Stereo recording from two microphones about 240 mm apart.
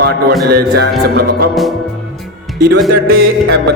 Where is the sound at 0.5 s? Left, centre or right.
Right.